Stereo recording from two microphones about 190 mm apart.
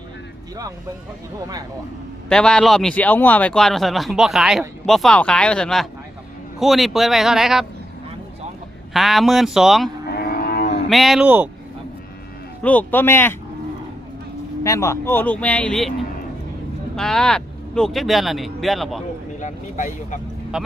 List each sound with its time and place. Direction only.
2.3 s speech: 5° left (ahead or behind)
8.9 s speech: centre (ahead or behind)
10.1 s livestock: 55° left (ahead or behind)
10.8 s speech: centre (ahead or behind)
12.6 s speech: 10° left (ahead or behind)
14.6 s speech: 15° left (ahead or behind)
16.9 s speech: 5° left (ahead or behind)
19.4 s speech: 40° left (ahead or behind)